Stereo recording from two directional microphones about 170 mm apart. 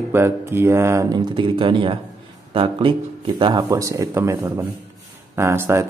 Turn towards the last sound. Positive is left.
turn(degrees=-15)  # may be behind; listen again after turning